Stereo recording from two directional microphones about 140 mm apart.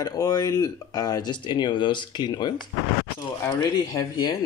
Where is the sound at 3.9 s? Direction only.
30° left (ahead or behind).